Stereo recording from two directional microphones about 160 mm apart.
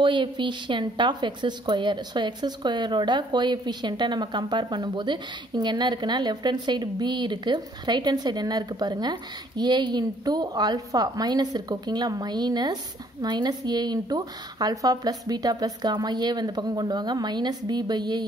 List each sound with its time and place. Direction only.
0.0 s a woman's voice: 30° right (ahead or behind)